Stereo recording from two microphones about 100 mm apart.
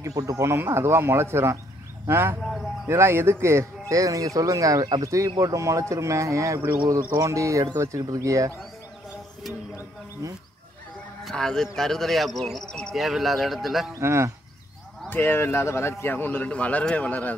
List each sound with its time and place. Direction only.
0.0 s speech: 35° right (ahead or behind)
0.5 s speech: 25° right (ahead or behind)
11.2 s speech: 5° left (ahead or behind)
13.9 s speech: 30° right (ahead or behind)
15.0 s a man's voice: 20° left (ahead or behind)